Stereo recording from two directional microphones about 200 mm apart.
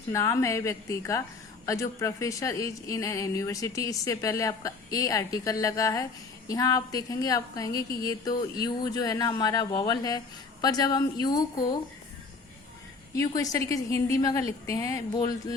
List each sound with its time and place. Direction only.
0.1 s a woman's voice: 15° left (ahead or behind)
13.1 s speech: 15° left (ahead or behind)